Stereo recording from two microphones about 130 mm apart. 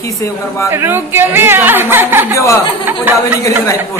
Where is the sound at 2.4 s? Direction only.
25° left (ahead or behind).